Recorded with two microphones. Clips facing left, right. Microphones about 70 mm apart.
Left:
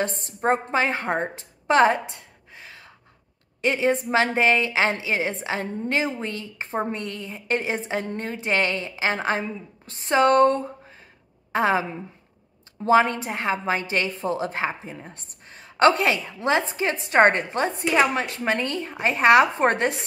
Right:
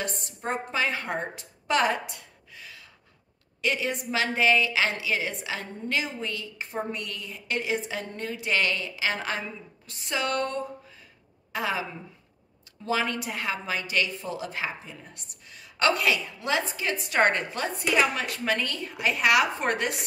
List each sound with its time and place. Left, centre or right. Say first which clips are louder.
0.0 s a woman's voice: left 8 dB; left